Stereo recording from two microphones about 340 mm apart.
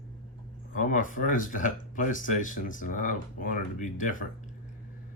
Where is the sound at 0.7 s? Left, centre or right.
Left.